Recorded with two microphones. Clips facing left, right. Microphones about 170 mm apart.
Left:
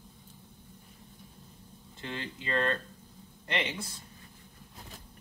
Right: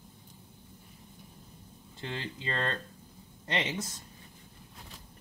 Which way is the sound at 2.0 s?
25° right (ahead or behind).